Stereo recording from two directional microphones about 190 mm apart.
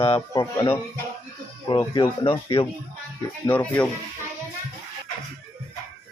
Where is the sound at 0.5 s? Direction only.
15° left (ahead or behind).